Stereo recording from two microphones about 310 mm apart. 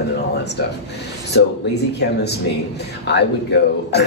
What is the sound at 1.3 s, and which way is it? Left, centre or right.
Speech, left.